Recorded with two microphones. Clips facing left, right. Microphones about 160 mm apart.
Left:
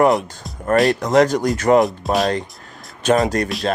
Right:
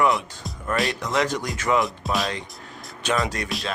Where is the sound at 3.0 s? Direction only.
45° left (ahead or behind).